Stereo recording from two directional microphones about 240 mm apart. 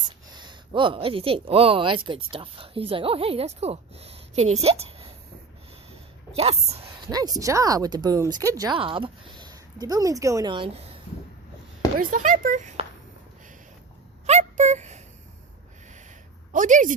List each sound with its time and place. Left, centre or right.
0.3 s speech: centre
6.3 s speech: right
11.9 s speech: right
14.3 s a sound: right
16.5 s speech: right